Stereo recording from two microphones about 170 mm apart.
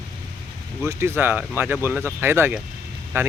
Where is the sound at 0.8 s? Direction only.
15° right (ahead or behind).